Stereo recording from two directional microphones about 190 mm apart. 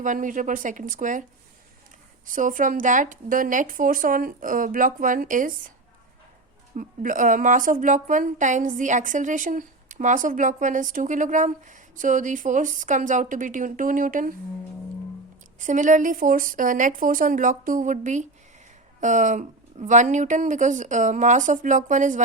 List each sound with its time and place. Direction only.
0.0 s a woman's voice: 45° right (ahead or behind)
2.2 s a woman's voice: 45° right (ahead or behind)
6.7 s a woman's voice: 45° right (ahead or behind)
15.5 s a woman's voice: 40° right (ahead or behind)